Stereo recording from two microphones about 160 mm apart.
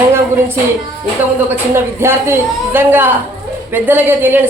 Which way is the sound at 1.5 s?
15° right (ahead or behind).